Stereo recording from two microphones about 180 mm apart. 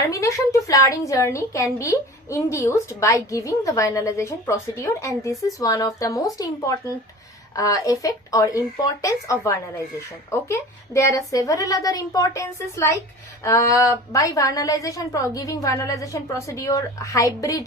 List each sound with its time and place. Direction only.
0.1 s a woman's voice: 15° left (ahead or behind)